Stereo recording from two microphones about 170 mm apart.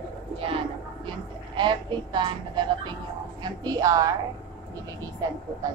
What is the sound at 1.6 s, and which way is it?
Speech, 25° right (ahead or behind).